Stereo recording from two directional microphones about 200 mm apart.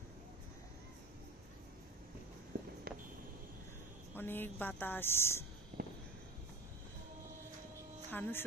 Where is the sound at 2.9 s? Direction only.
50° right (ahead or behind).